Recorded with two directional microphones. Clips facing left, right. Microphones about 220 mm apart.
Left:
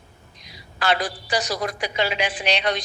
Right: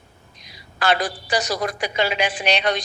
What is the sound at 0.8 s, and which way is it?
Speech, 50° right (ahead or behind).